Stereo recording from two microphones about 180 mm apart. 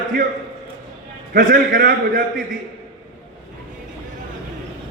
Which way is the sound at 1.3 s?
50° right (ahead or behind).